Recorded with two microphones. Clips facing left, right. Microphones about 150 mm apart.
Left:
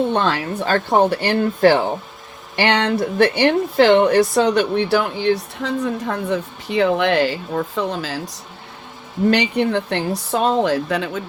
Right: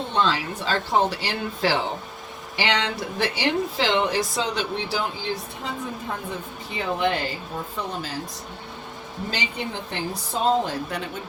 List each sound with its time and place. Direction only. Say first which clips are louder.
0.1 s speech: left 4 dB; 55° left (ahead or behind); by 8.2 s 90° left
9.3 s speech: left 12 dB; 65° left (ahead or behind); by 11.2 s 90° left